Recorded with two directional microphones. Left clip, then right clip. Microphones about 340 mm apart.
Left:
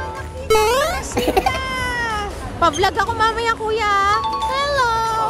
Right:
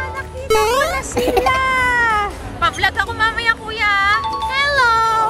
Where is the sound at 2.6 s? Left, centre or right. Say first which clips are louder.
Even; centre.